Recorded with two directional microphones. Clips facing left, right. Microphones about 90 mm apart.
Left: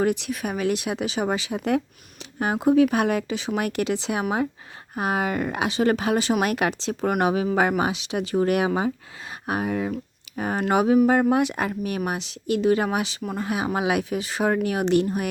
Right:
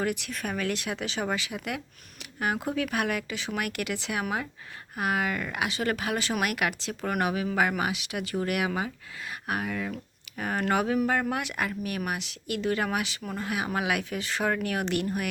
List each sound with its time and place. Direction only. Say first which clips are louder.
0.0 s speech: left 7 dB; 25° left (ahead or behind)
0.3 s speech: left 6 dB; 15° left (ahead or behind)